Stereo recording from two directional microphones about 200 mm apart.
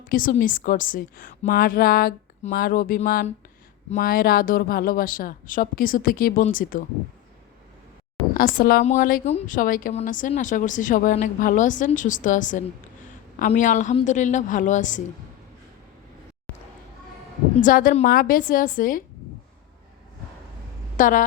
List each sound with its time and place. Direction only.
0.1 s a woman's voice: 45° left (ahead or behind)
8.3 s a woman's voice: 45° left (ahead or behind)
17.6 s a woman's voice: 45° left (ahead or behind)
20.9 s a woman's voice: 40° left (ahead or behind)